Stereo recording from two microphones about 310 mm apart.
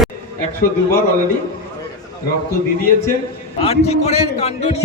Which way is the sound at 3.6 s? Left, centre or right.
Centre.